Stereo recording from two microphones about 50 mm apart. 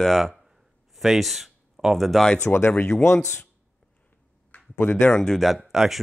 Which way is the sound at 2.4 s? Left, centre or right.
Left.